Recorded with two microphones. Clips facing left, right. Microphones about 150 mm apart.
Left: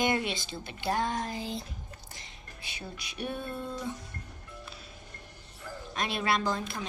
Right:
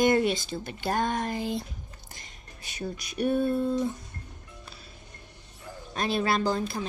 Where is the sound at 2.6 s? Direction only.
45° right (ahead or behind).